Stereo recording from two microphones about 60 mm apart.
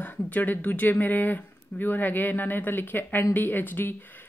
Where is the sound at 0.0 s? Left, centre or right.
Left.